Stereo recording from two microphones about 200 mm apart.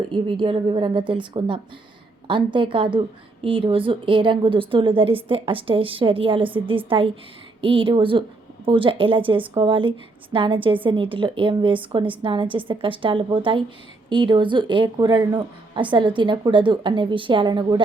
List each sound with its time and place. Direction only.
0.1 s a woman's voice: 25° right (ahead or behind)